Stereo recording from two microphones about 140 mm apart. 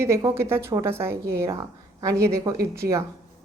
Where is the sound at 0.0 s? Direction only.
25° right (ahead or behind).